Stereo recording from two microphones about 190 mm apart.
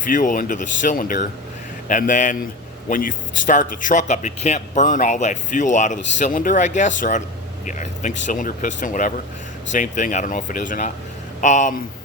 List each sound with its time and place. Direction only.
0.1 s speech: 45° left (ahead or behind)